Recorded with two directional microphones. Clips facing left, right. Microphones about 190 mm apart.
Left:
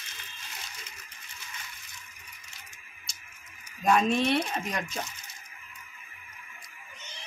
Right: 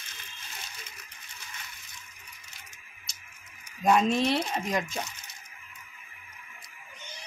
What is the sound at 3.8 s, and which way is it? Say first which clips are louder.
Speech: right 1 dB; 25° right (ahead or behind).